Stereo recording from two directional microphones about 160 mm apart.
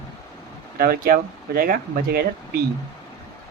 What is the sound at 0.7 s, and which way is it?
Speech, 70° right (ahead or behind).